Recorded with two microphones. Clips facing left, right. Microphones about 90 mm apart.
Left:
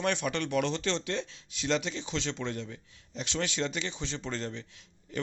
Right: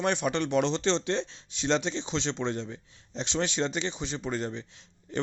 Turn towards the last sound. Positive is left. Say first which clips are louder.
# right 4 dB
turn(degrees=-30)  # may be behind; listen again after turning